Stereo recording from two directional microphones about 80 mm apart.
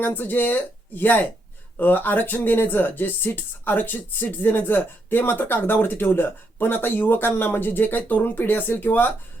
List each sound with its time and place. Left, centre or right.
0.0 s speech: left